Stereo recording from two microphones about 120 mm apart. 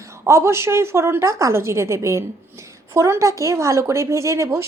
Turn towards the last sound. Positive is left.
turn(degrees=-20)  # may be behind; listen again after turning